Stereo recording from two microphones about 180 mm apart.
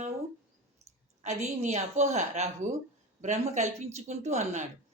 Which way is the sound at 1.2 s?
40° right (ahead or behind).